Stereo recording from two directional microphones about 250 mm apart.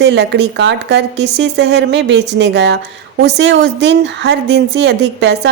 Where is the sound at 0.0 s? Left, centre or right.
Right.